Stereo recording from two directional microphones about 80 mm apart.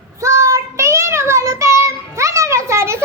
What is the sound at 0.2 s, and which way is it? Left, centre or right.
Child singing, right.